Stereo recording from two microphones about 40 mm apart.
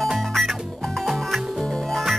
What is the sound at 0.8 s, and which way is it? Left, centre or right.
Music, centre.